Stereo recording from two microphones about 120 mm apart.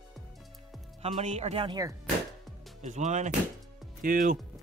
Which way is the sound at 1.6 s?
30° right (ahead or behind).